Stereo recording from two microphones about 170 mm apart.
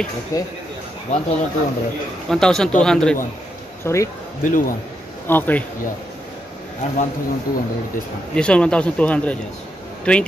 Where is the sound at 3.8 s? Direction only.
15° left (ahead or behind).